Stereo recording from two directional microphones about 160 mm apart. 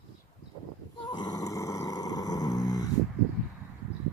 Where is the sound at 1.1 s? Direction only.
25° left (ahead or behind).